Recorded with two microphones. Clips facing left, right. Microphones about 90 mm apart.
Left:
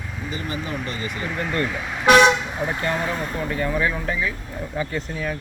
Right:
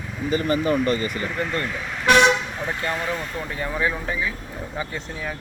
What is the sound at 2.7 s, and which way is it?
Speech, 25° left (ahead or behind).